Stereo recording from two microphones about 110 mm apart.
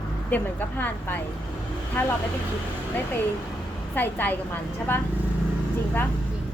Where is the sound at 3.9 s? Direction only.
15° left (ahead or behind).